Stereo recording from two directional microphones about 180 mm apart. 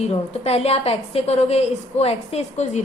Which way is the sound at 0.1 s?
35° left (ahead or behind).